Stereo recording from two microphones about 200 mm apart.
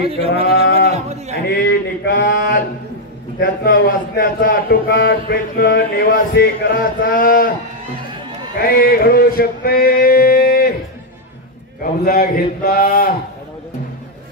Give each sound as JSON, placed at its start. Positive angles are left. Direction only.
{"t": 0.0, "sound": "a sound", "side_deg": -30}
{"t": 0.5, "sound": "sheep", "side_deg": 50}
{"t": 0.9, "sound": "speech", "side_deg": -35}
{"t": 1.3, "sound": "a sound", "side_deg": 55}
{"t": 3.3, "sound": "a man's voice", "side_deg": 50}
{"t": 8.5, "sound": "a man's voice", "side_deg": 45}
{"t": 11.8, "sound": "a man's voice", "side_deg": 50}